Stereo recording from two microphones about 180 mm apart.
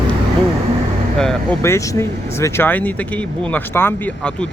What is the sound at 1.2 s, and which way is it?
Speech, 5° left (ahead or behind).